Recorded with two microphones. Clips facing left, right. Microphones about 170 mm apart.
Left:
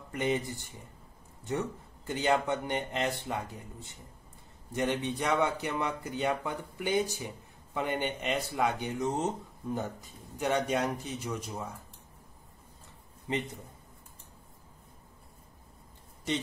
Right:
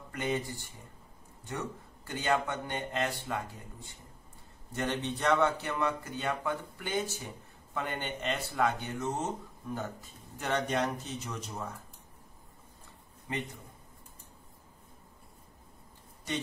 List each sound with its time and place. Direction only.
0.1 s speech: 20° left (ahead or behind)
2.1 s speech: 20° left (ahead or behind)
13.3 s speech: 25° left (ahead or behind)